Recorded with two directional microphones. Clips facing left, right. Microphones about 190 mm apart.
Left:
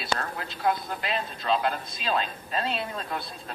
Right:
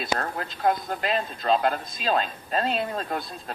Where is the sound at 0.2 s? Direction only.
45° right (ahead or behind).